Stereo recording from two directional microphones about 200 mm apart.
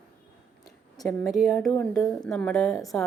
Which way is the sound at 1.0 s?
Centre (ahead or behind).